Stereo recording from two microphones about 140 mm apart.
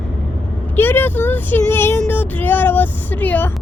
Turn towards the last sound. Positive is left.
turn(degrees=15)  # may be behind; listen again after turning